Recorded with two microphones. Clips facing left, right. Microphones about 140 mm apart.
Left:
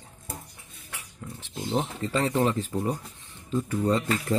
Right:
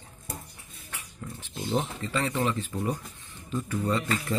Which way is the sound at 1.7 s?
35° left (ahead or behind).